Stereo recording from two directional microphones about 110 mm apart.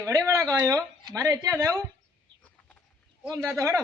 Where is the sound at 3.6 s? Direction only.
25° right (ahead or behind).